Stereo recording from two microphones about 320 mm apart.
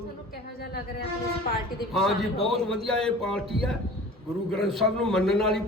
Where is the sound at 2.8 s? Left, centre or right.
Centre.